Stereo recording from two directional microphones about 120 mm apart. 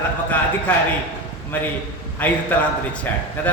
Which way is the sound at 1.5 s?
15° left (ahead or behind).